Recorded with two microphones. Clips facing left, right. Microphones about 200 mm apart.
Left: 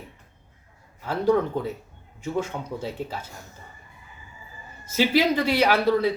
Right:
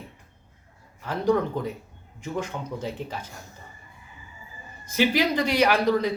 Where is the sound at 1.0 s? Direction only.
5° left (ahead or behind).